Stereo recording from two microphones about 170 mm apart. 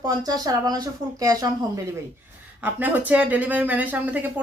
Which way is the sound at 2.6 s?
10° right (ahead or behind).